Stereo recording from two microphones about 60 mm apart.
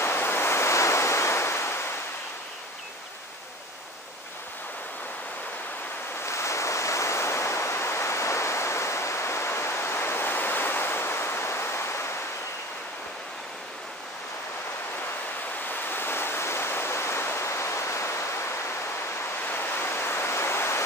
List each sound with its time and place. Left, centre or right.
0.0 s waves: left
6.2 s waves: left
15.7 s waves: left
19.4 s waves: left